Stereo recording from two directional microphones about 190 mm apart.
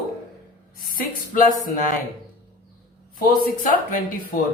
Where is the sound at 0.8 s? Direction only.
45° left (ahead or behind).